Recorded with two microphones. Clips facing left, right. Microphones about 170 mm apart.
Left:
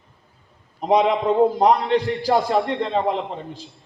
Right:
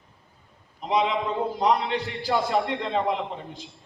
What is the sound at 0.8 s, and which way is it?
A man's voice, 40° left (ahead or behind).